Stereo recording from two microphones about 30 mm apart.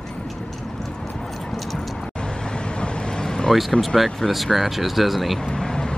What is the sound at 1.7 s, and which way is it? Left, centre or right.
Vehicle, left.